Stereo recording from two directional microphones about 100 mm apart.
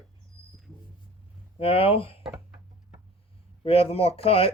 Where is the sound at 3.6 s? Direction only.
75° left (ahead or behind).